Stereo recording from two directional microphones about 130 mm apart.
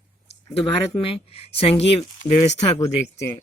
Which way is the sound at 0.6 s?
45° left (ahead or behind).